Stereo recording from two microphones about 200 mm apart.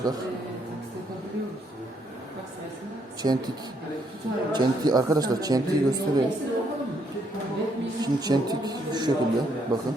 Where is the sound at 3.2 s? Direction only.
25° right (ahead or behind).